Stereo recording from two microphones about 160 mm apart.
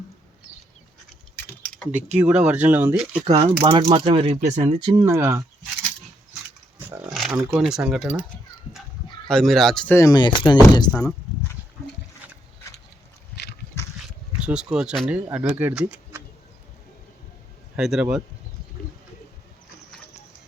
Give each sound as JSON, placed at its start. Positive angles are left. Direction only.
{"t": 1.4, "sound": "a sound", "side_deg": 10}
{"t": 2.1, "sound": "speech", "side_deg": -5}
{"t": 3.2, "sound": "speech", "side_deg": -35}
{"t": 4.8, "sound": "speech", "side_deg": -25}
{"t": 7.1, "sound": "speech", "side_deg": 0}
{"t": 9.2, "sound": "speech", "side_deg": 0}
{"t": 9.9, "sound": "speech", "side_deg": 20}
{"t": 13.3, "sound": "a sound", "side_deg": 90}
{"t": 14.4, "sound": "speech", "side_deg": -5}
{"t": 17.7, "sound": "speech", "side_deg": -5}